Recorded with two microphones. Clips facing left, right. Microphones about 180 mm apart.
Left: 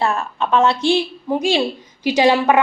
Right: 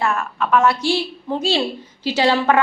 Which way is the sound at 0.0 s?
30° left (ahead or behind).